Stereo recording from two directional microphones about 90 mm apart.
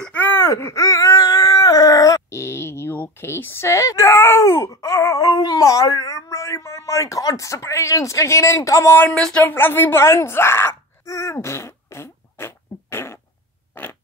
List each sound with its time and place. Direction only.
0.0 s speech: 20° left (ahead or behind)
9.1 s speech: 10° left (ahead or behind)
9.4 s groan: 25° left (ahead or behind)
13.7 s a sound: 20° left (ahead or behind)